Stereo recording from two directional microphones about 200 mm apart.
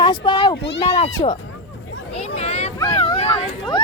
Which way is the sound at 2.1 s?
30° left (ahead or behind).